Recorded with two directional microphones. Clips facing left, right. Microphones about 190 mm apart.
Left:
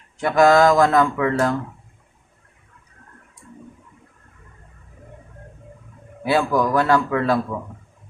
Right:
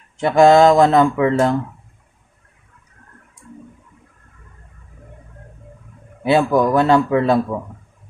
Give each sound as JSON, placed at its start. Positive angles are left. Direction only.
{"t": 0.2, "sound": "speech", "side_deg": -25}
{"t": 6.2, "sound": "speech", "side_deg": -25}